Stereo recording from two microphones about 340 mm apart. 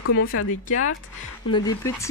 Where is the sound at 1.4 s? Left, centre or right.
Centre.